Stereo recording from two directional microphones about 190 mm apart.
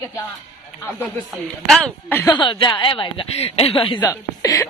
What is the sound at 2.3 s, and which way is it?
Speech, 25° left (ahead or behind).